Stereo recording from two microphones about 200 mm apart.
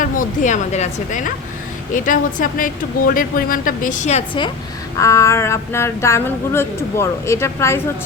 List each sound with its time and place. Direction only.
0.0 s a woman's voice: 40° left (ahead or behind)
4.9 s speech: 15° left (ahead or behind)